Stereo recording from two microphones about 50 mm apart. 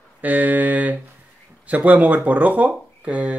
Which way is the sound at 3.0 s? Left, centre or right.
Right.